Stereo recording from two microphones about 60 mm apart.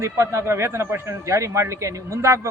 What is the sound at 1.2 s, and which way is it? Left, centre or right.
A man's voice, right.